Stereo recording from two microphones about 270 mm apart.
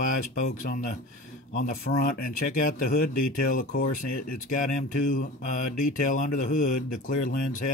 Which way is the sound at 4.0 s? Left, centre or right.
Left.